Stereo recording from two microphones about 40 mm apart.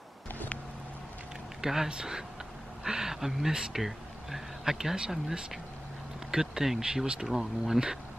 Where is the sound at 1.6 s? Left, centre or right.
Centre.